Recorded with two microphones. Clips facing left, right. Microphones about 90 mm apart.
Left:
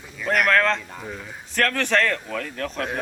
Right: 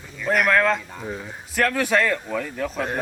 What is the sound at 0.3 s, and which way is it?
Speech, 5° right (ahead or behind).